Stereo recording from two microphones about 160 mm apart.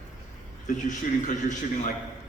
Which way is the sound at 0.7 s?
50° left (ahead or behind).